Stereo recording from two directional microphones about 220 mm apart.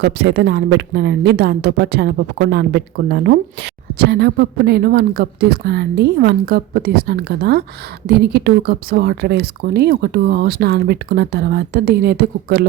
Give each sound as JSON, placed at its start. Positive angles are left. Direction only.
{"t": 0.0, "sound": "speech", "side_deg": -50}